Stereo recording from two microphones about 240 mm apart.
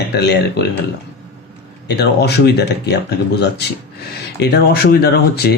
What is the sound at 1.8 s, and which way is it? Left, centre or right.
Speech, left.